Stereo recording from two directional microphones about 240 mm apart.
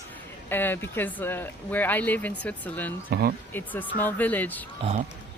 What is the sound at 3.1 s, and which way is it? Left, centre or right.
Speech, right.